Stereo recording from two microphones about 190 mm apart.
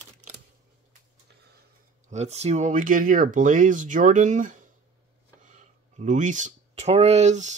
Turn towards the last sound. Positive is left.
turn(degrees=-40)  # may be behind; listen again after turning